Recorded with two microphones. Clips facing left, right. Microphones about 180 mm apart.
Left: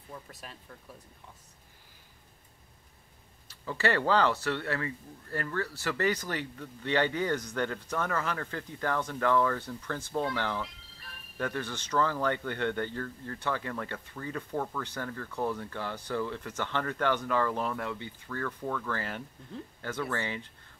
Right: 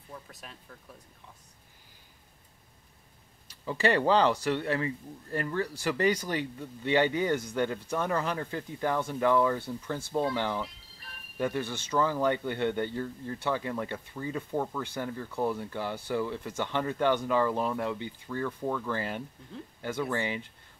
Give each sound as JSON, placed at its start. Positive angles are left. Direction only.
{"t": 0.3, "sound": "speech", "side_deg": 0}
{"t": 3.4, "sound": "speech", "side_deg": -15}